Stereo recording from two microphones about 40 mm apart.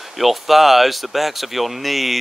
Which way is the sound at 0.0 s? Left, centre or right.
Centre.